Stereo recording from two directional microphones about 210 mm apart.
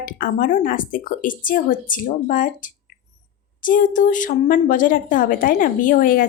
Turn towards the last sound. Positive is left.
turn(degrees=40)  # may be behind; listen again after turning